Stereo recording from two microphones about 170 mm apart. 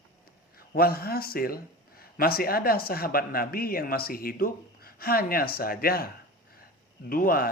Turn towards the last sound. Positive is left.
turn(degrees=60)  # may be behind; listen again after turning